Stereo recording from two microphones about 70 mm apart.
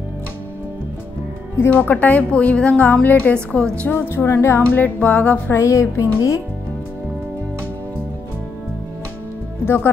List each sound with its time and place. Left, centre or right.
1.6 s a woman's voice: left
3.3 s a woman's voice: centre
3.9 s speech: left
4.7 s a woman's voice: left
5.5 s speech: left